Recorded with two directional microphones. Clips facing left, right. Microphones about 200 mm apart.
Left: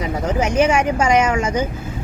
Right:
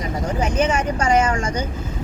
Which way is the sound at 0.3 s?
10° left (ahead or behind).